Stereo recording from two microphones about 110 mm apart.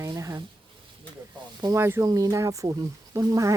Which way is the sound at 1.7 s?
20° right (ahead or behind).